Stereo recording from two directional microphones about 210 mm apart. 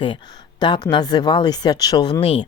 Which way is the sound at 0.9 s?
20° left (ahead or behind).